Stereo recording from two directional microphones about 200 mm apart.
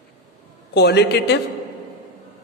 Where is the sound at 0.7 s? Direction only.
55° left (ahead or behind).